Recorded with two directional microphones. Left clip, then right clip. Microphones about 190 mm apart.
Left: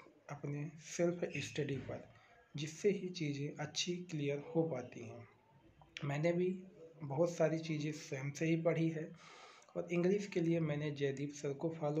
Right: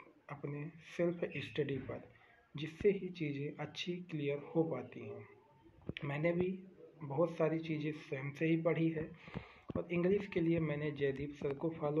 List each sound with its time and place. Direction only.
0.3 s speech: 20° left (ahead or behind)